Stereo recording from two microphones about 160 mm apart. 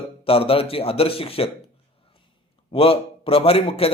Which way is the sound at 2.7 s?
35° left (ahead or behind).